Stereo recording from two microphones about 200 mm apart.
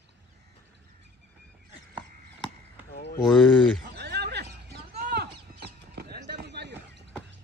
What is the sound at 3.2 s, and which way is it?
Speech, 5° left (ahead or behind).